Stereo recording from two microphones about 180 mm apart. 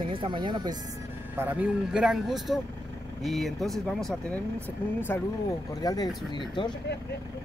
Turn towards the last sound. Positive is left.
turn(degrees=25)  # may be behind; listen again after turning